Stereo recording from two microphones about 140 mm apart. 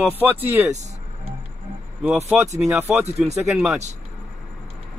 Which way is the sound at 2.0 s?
15° right (ahead or behind).